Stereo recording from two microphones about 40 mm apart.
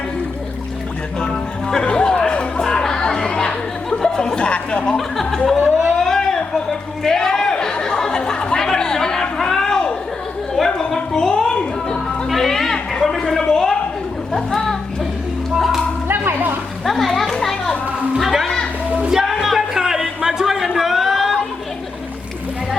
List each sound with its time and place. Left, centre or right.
1.7 s chatter: left
4.9 s speech: centre
6.0 s a sound: centre
12.3 s a sound: centre
14.3 s music: centre
15.5 s music: centre
16.8 s children playing: centre
18.2 s music: centre
18.9 s a sound: centre